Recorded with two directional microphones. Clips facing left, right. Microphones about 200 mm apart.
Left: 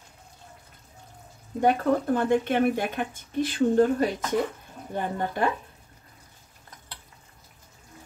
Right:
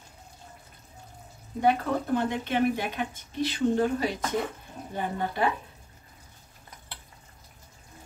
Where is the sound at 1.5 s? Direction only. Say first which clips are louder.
Left 3 dB; 50° left (ahead or behind).